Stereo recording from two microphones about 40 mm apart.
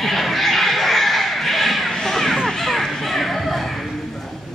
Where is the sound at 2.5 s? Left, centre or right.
Centre.